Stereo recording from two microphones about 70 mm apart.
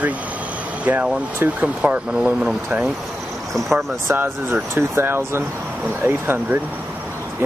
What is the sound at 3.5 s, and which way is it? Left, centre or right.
Speech, centre.